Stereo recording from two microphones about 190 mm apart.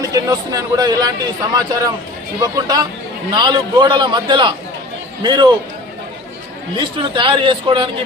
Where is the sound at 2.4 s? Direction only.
20° right (ahead or behind).